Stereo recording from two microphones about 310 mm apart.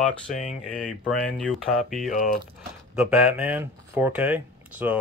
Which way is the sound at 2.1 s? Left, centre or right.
Left.